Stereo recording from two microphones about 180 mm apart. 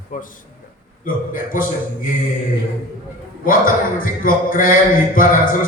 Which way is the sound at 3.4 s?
50° left (ahead or behind).